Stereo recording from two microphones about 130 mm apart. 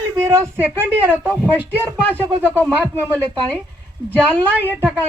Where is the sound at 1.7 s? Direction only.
20° left (ahead or behind).